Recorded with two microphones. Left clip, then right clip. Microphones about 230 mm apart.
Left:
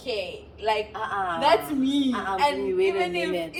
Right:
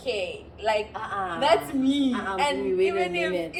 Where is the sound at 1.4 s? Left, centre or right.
Centre.